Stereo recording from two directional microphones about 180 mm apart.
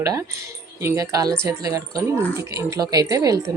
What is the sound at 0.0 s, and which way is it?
A woman's voice, 15° right (ahead or behind).